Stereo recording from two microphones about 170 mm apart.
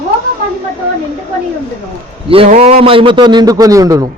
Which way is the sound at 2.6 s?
35° right (ahead or behind).